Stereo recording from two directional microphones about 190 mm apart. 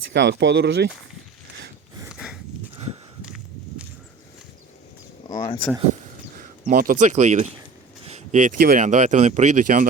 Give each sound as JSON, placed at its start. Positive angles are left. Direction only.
{"t": 0.1, "sound": "speech", "side_deg": -65}
{"t": 2.0, "sound": "a sound", "side_deg": -5}
{"t": 3.2, "sound": "walk", "side_deg": -5}
{"t": 5.3, "sound": "speech", "side_deg": 20}
{"t": 6.3, "sound": "speech", "side_deg": -50}